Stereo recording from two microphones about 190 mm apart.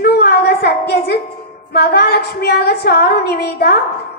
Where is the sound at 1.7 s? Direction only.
55° left (ahead or behind).